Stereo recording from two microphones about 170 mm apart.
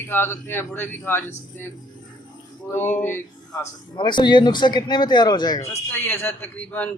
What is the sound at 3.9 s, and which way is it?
Speech, 25° left (ahead or behind).